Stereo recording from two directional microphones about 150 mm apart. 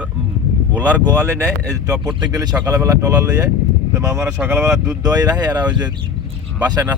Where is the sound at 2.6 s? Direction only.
20° right (ahead or behind).